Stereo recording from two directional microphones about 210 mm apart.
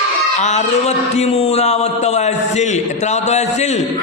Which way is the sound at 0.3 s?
35° left (ahead or behind).